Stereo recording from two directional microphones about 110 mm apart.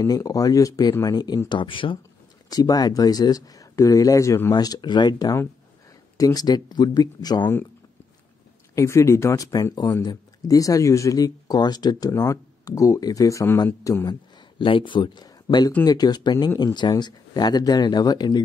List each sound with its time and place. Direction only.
0.0 s speech: 35° left (ahead or behind)
1.5 s speech: 50° left (ahead or behind)
2.5 s speech: 35° left (ahead or behind)
8.7 s speech: 25° left (ahead or behind)
14.6 s speech: 50° left (ahead or behind)